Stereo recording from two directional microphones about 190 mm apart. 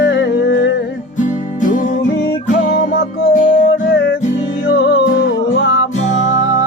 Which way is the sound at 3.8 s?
75° left (ahead or behind).